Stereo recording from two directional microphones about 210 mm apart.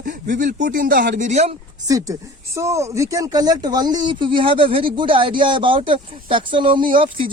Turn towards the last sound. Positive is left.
turn(degrees=-25)  # may be behind; listen again after turning